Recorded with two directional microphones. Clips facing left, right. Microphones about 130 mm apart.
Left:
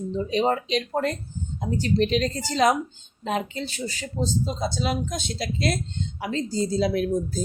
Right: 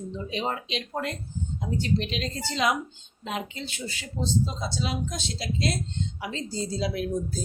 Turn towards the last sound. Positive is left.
turn(degrees=50)  # may be behind; listen again after turning